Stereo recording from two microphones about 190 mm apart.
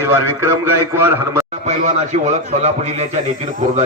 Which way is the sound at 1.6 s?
35° right (ahead or behind).